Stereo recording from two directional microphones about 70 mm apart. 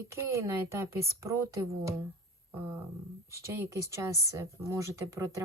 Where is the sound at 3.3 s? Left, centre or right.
Right.